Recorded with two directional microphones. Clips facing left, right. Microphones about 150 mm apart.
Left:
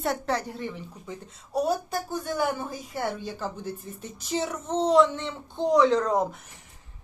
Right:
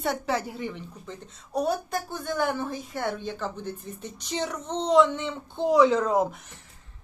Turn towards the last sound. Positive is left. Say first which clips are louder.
# even
turn(degrees=-5)  # may be behind; listen again after turning